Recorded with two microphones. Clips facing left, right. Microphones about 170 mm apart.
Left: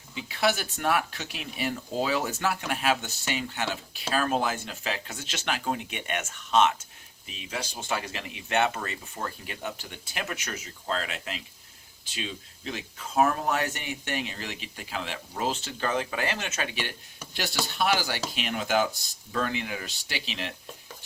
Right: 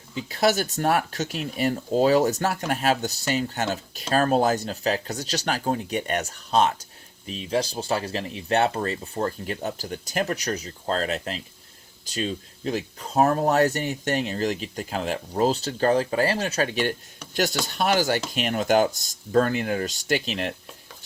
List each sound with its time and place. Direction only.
0.3 s speech: 40° right (ahead or behind)